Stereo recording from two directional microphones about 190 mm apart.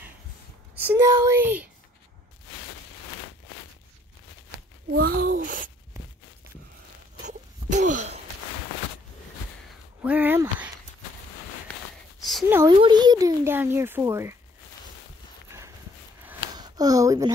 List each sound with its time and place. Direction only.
0.8 s speech: 15° right (ahead or behind)
4.9 s a child's voice: 55° right (ahead or behind)
7.2 s wail: 40° right (ahead or behind)
10.0 s speech: 10° right (ahead or behind)
12.2 s a sound: centre (ahead or behind)
12.6 s speech: 20° right (ahead or behind)
16.5 s a sound: 20° right (ahead or behind)